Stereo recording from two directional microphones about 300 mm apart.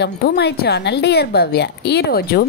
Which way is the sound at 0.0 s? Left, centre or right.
Left.